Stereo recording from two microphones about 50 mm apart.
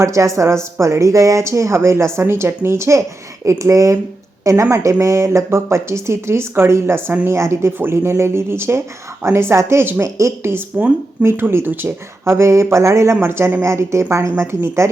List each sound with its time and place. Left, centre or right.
0.0 s speech: right
3.4 s speech: right
7.8 s speech: right
10.0 s a woman's voice: right
10.7 s speech: right
11.2 s speech: right
12.2 s speech: right
13.2 s speech: right
13.6 s speech: right